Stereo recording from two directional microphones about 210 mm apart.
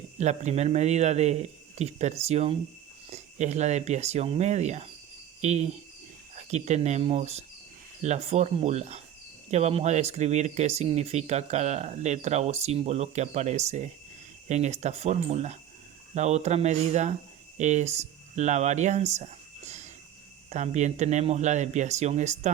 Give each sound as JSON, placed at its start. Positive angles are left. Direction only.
{"t": 0.2, "sound": "speech", "side_deg": -35}